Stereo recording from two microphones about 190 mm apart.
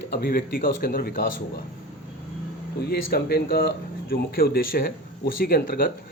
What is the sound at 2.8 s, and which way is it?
A man's voice, 60° left (ahead or behind).